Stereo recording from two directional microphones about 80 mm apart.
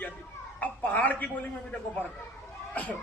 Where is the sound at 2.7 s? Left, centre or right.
Centre.